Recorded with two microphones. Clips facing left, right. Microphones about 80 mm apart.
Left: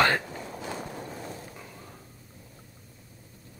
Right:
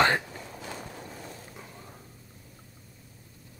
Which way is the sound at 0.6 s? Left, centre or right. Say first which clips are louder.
Left 4 dB; left.